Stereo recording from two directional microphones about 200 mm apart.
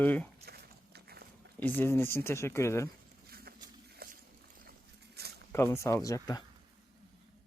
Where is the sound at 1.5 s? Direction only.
10° left (ahead or behind).